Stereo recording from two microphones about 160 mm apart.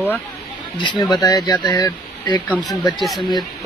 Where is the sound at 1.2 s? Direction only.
25° left (ahead or behind).